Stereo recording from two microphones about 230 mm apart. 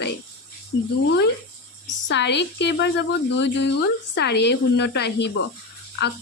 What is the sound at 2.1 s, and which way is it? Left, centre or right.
A woman's voice, left.